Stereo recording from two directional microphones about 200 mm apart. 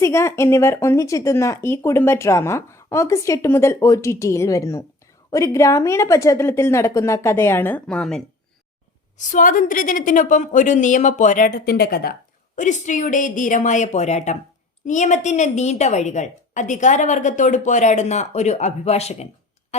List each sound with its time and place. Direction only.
0.0 s speech: 15° left (ahead or behind)
9.1 s a woman's voice: 40° left (ahead or behind)
12.5 s a woman's voice: 40° left (ahead or behind)